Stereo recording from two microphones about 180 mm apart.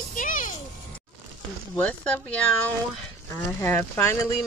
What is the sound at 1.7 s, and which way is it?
Speech, 5° left (ahead or behind).